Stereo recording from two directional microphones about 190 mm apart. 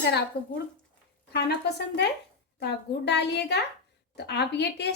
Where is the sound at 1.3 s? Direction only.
60° left (ahead or behind).